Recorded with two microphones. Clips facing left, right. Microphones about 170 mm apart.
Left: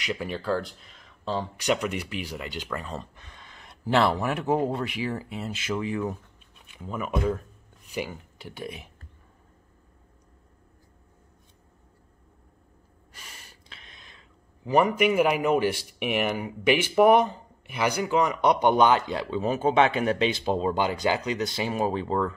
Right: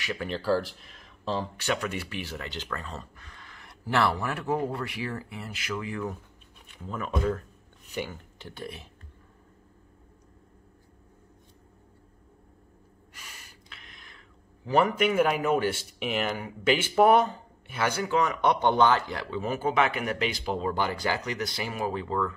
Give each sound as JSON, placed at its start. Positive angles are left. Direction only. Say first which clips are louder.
{"t": 0.0, "sound": "speech", "louder": "left 2 dB", "side_deg": 15}
{"t": 0.3, "sound": "speech", "louder": "right 4 dB", "side_deg": -5}
{"t": 1.6, "sound": "speech", "louder": "left 4 dB", "side_deg": 15}
{"t": 6.8, "sound": "speech", "louder": "left 2 dB", "side_deg": 10}
{"t": 13.7, "sound": "a sound", "louder": "even", "side_deg": 25}
{"t": 14.7, "sound": "speech", "louder": "left 2 dB", "side_deg": 10}